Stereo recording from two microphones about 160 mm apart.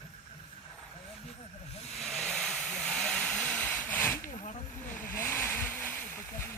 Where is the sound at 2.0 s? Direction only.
Centre (ahead or behind).